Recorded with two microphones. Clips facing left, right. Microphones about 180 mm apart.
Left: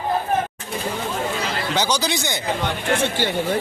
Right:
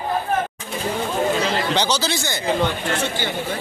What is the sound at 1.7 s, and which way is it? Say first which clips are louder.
Speech: even; 10° left (ahead or behind).